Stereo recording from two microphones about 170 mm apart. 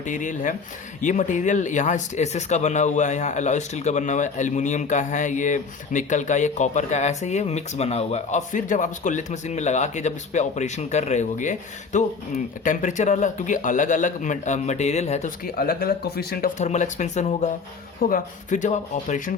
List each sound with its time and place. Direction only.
0.0 s speech: 50° left (ahead or behind)
15.5 s speech: 60° left (ahead or behind)
16.6 s speech: 45° left (ahead or behind)